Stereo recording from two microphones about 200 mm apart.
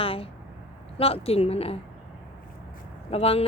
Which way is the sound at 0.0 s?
30° left (ahead or behind).